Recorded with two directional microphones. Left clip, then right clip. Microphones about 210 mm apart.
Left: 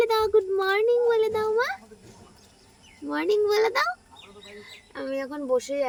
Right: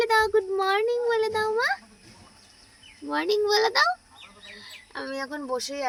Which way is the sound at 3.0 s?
Centre (ahead or behind).